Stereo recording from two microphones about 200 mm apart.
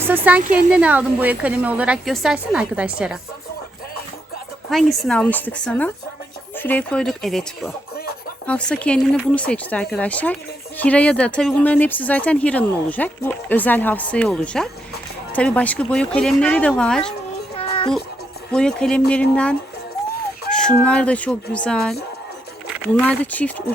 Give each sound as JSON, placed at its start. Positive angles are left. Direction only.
{"t": 0.0, "sound": "a woman's voice", "side_deg": -10}
{"t": 4.7, "sound": "speech", "side_deg": 0}
{"t": 17.6, "sound": "music", "side_deg": 25}
{"t": 18.5, "sound": "speech", "side_deg": 5}
{"t": 23.0, "sound": "speech", "side_deg": 5}